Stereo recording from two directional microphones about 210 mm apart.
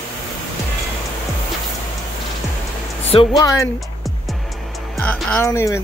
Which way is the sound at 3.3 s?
15° left (ahead or behind).